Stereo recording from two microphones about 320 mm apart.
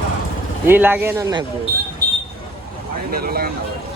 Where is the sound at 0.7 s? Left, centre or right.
Centre.